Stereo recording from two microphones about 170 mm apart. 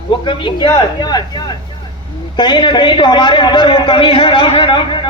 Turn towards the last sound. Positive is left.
turn(degrees=30)  # may be behind; listen again after turning